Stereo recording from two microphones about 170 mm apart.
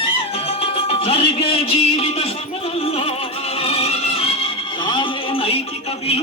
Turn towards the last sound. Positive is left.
turn(degrees=35)  # may be behind; listen again after turning